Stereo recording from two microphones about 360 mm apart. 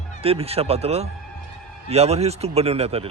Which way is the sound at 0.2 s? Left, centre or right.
Centre.